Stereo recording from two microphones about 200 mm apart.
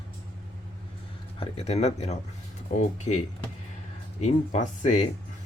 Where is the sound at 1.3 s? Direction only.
30° left (ahead or behind).